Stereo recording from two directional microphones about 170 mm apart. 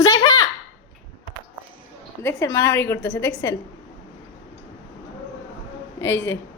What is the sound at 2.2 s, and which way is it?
A woman's voice, 20° left (ahead or behind).